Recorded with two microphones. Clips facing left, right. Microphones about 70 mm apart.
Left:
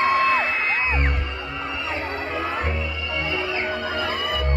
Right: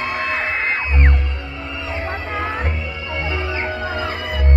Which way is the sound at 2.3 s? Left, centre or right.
Right.